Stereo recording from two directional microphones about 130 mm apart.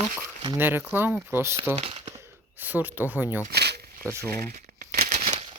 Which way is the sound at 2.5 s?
15° right (ahead or behind).